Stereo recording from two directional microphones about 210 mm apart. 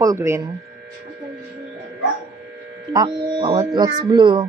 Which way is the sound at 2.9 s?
20° right (ahead or behind).